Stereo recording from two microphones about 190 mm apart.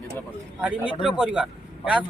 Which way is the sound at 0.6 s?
5° right (ahead or behind).